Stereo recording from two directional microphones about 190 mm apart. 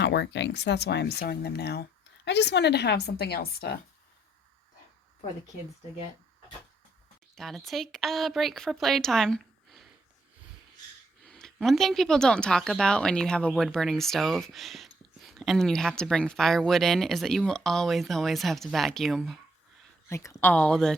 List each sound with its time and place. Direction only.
0.0 s speech: 65° left (ahead or behind)
7.3 s speech: centre (ahead or behind)
11.3 s speech: 5° left (ahead or behind)
20.1 s speech: 15° left (ahead or behind)